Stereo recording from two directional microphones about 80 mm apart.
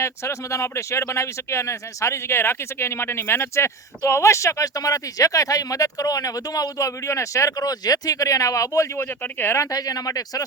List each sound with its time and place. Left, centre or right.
0.0 s speech: left
9.0 s speech: left
9.6 s speech: left